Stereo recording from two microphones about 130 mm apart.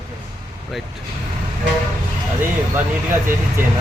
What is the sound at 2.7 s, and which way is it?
Speech, 15° right (ahead or behind).